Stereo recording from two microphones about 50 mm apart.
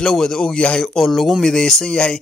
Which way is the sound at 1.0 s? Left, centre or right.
Centre.